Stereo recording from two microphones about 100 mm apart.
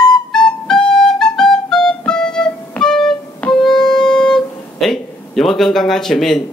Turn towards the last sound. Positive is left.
turn(degrees=5)  # may be behind; listen again after turning